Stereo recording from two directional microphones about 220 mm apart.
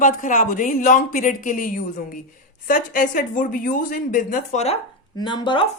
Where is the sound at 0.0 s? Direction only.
35° left (ahead or behind).